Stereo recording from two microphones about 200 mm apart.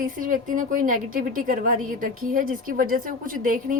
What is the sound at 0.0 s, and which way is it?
A woman's voice, 40° right (ahead or behind).